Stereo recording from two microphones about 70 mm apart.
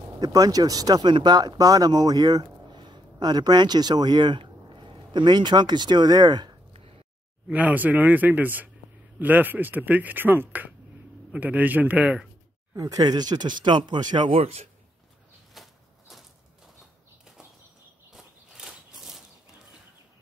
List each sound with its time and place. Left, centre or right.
0.2 s speech: right
7.4 s speech: right
12.7 s speech: right
15.5 s a sound: centre
18.1 s walk: centre